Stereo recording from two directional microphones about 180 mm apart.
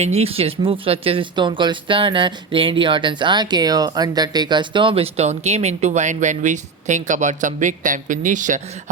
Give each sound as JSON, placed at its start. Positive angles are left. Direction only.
{"t": 0.0, "sound": "speech", "side_deg": -35}